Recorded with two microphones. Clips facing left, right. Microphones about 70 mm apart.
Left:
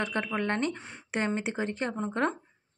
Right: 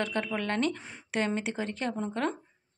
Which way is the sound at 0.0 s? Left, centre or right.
Left.